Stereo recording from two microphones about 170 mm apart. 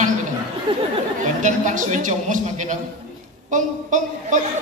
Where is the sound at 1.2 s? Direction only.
45° right (ahead or behind).